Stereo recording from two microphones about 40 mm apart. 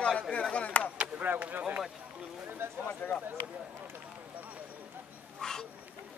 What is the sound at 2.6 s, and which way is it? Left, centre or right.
Speech, right.